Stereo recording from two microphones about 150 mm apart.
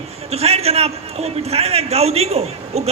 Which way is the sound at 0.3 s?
45° right (ahead or behind).